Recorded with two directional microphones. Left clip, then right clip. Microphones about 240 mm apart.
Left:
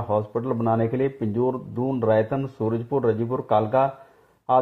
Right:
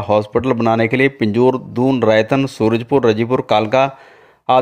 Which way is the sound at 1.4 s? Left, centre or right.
Right.